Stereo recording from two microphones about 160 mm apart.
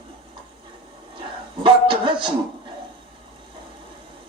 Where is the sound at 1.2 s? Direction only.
30° right (ahead or behind).